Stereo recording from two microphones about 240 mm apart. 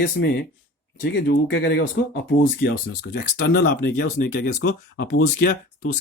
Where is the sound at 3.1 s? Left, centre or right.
Left.